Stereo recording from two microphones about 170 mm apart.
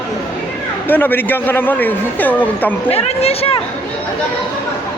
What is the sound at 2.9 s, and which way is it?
Speech, 35° left (ahead or behind).